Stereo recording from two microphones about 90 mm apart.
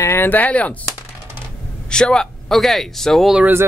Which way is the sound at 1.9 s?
10° left (ahead or behind).